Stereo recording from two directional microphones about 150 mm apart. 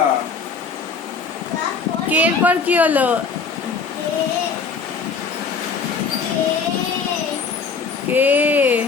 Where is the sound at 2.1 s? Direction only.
10° right (ahead or behind).